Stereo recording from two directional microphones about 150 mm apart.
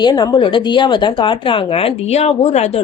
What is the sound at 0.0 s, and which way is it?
Speech, 30° left (ahead or behind).